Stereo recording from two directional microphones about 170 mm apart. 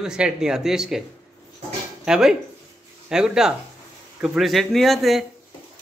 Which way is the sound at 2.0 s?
5° right (ahead or behind).